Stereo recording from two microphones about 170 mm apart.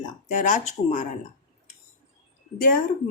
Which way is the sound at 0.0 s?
50° left (ahead or behind).